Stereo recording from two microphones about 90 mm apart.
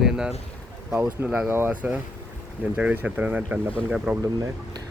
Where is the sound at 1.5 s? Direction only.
20° right (ahead or behind).